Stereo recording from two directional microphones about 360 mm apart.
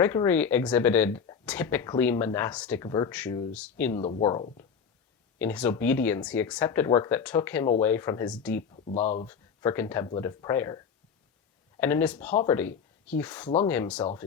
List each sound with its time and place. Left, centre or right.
0.0 s speech: centre
5.4 s speech: centre
8.8 s speech: centre
9.2 s speech: centre
11.8 s speech: centre